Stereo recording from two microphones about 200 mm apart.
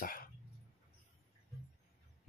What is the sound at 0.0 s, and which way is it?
Dog, 45° left (ahead or behind).